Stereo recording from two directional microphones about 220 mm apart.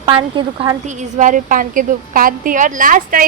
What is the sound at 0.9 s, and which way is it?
A woman's voice, 35° right (ahead or behind).